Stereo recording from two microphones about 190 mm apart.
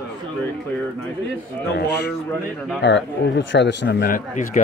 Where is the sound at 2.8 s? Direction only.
65° left (ahead or behind).